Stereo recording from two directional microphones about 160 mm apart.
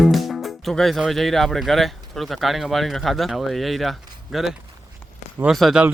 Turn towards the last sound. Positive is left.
turn(degrees=0)  # may be behind; listen again after turning